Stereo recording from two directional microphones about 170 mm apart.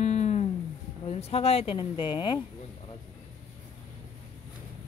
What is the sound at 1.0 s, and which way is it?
Speech, 35° left (ahead or behind).